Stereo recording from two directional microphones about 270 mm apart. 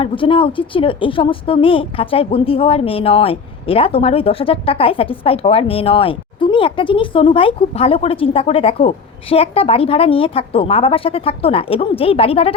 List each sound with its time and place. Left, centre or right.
0.0 s a woman's voice: centre